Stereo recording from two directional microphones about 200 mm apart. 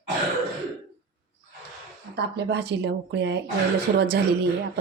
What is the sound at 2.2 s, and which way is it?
Speech, 55° right (ahead or behind).